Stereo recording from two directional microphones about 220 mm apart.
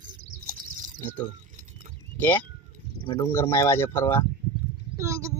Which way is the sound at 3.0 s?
25° left (ahead or behind).